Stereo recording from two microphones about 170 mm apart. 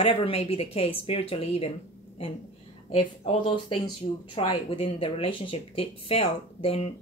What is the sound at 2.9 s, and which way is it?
Speech, 35° left (ahead or behind).